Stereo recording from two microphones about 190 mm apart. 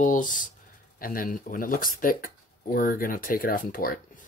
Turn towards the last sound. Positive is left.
turn(degrees=50)  # may be behind; listen again after turning